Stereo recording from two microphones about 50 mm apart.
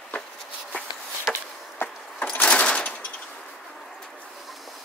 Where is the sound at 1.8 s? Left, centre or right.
Left.